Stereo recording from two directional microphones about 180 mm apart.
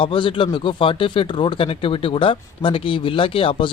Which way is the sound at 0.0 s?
30° left (ahead or behind).